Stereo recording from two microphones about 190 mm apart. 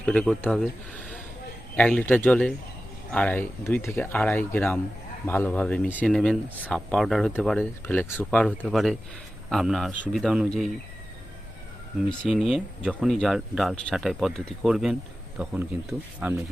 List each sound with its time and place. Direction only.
0.0 s speech: 5° left (ahead or behind)
12.0 s speech: 5° left (ahead or behind)